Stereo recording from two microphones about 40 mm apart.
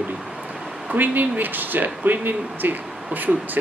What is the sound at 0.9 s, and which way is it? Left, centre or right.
Speech, right.